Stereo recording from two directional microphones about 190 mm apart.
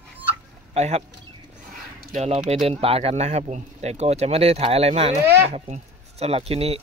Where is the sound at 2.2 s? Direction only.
35° right (ahead or behind).